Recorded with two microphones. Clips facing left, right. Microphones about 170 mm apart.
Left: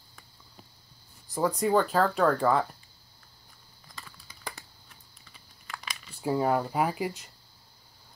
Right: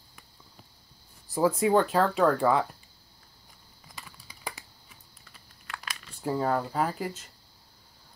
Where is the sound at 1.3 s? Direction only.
5° right (ahead or behind).